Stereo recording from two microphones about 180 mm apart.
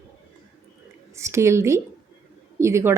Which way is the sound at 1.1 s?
15° right (ahead or behind).